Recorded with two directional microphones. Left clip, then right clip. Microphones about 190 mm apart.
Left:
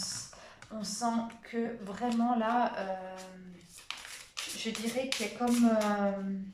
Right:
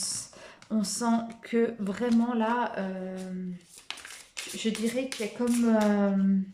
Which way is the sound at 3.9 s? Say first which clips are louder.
Right 2 dB; 45° right (ahead or behind).